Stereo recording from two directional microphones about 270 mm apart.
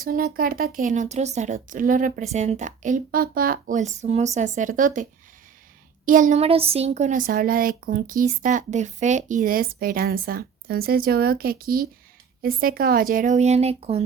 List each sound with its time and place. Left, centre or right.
0.0 s speech: right
6.1 s speech: right